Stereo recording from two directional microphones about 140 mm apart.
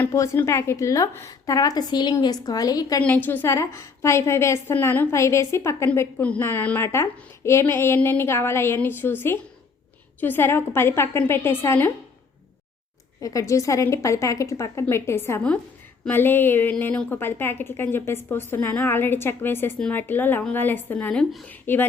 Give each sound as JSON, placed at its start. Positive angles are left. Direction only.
{"t": 0.1, "sound": "a woman's voice", "side_deg": 20}
{"t": 3.0, "sound": "a woman's voice", "side_deg": 15}
{"t": 13.2, "sound": "a woman's voice", "side_deg": 25}